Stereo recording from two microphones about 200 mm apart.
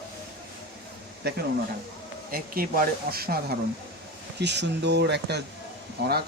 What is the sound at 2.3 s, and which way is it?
Speech, 45° right (ahead or behind).